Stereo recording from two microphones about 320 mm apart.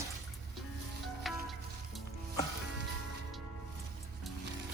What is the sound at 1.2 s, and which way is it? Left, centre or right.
Music, centre.